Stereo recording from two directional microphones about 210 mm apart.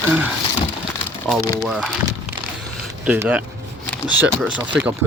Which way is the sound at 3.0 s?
10° right (ahead or behind).